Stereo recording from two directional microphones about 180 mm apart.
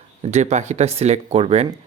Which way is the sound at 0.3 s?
40° right (ahead or behind).